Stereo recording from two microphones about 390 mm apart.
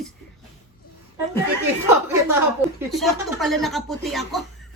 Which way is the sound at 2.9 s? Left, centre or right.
Centre.